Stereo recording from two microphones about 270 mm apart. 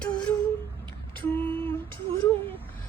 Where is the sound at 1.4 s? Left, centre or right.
Centre.